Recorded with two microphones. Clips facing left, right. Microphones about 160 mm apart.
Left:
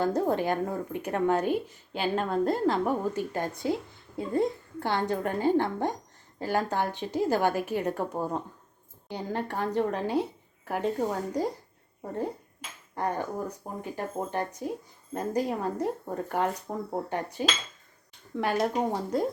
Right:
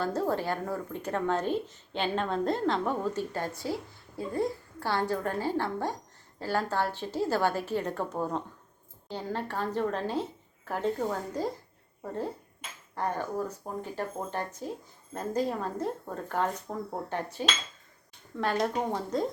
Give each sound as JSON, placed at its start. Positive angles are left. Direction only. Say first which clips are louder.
{"t": 0.0, "sound": "a woman's voice", "louder": "left 3 dB", "side_deg": 15}
{"t": 13.0, "sound": "a woman's voice", "louder": "left 1 dB", "side_deg": 15}